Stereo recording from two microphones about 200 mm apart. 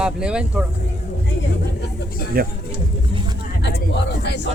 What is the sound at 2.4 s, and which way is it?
Speech, 50° right (ahead or behind).